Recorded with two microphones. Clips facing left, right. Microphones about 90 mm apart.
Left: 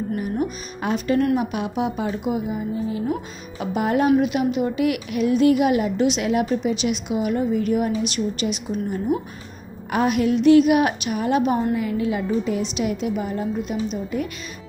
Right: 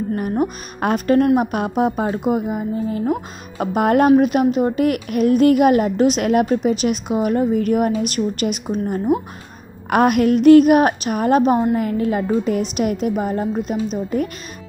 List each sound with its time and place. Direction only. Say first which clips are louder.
0.1 s speech: right 6 dB; 50° right (ahead or behind)
9.8 s speech: right 5 dB; 60° right (ahead or behind); by 14.3 s 40° right (ahead or behind)